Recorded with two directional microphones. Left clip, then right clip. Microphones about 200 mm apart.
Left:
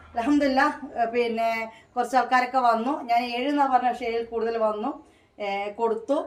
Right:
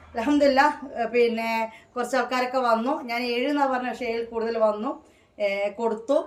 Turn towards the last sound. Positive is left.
turn(degrees=-20)  # may be behind; listen again after turning